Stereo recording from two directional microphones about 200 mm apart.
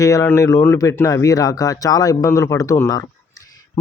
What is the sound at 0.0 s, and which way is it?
Speech, 15° left (ahead or behind).